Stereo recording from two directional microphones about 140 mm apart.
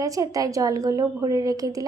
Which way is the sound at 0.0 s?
25° right (ahead or behind).